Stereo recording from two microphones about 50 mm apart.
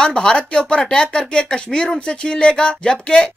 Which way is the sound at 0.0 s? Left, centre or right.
Centre.